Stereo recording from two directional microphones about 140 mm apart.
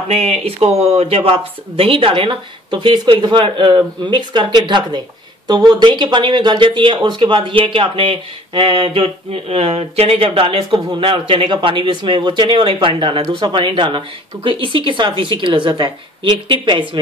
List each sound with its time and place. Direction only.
0.1 s speech: 50° right (ahead or behind); by 17.0 s 35° right (ahead or behind)